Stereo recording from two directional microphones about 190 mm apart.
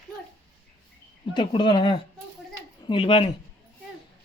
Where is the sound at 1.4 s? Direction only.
25° left (ahead or behind).